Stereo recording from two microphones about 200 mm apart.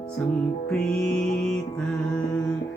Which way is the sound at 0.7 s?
5° left (ahead or behind).